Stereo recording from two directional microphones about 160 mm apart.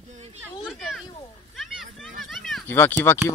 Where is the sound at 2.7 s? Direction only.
15° left (ahead or behind).